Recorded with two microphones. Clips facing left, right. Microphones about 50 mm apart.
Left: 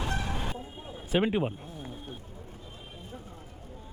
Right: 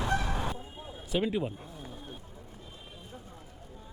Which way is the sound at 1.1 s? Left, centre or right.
Left.